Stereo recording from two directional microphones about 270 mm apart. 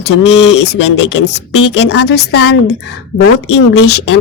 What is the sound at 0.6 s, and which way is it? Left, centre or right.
A man's voice, left.